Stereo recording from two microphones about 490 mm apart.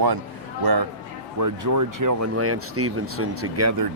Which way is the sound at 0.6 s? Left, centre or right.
Right.